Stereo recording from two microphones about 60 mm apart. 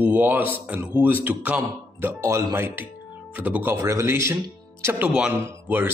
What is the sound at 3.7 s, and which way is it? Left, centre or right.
Speech, right.